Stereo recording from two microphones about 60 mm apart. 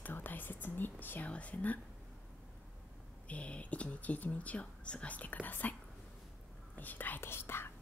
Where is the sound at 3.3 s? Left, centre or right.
Left.